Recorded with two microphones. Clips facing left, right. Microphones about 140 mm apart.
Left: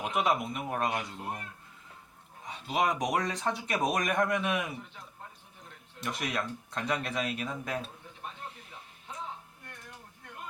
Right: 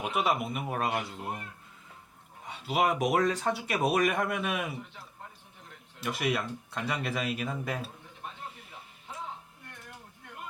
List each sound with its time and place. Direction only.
0.0 s speech: 5° right (ahead or behind)
2.5 s speech: 5° right (ahead or behind)
6.0 s speech: 5° right (ahead or behind)